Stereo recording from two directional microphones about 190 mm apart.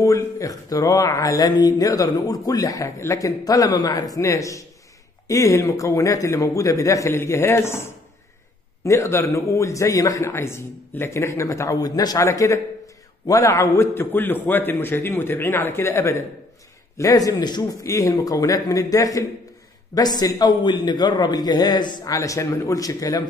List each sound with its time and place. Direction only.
0.0 s a man's voice: 15° left (ahead or behind)